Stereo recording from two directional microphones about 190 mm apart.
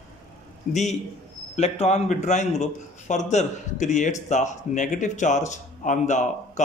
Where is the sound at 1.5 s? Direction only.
35° left (ahead or behind).